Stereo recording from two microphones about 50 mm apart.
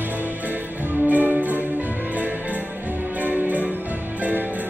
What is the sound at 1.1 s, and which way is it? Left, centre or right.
Music, right.